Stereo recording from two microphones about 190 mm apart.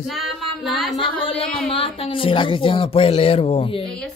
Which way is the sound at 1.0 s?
30° left (ahead or behind).